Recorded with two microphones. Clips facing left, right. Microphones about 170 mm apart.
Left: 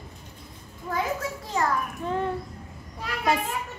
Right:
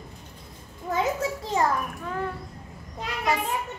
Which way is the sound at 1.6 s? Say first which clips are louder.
Right 2 dB; 25° right (ahead or behind).